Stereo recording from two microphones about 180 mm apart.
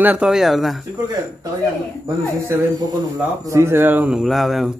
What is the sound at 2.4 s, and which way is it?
A man's voice, 20° right (ahead or behind).